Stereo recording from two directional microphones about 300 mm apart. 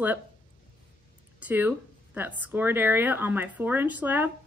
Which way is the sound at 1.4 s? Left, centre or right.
Centre.